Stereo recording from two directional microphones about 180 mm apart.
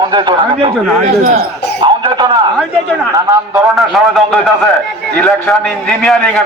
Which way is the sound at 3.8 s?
Centre (ahead or behind).